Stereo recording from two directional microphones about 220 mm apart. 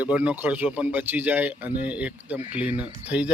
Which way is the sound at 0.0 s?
5° right (ahead or behind).